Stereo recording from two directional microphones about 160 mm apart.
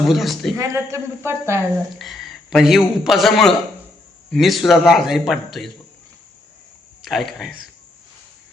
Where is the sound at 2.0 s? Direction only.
Centre (ahead or behind).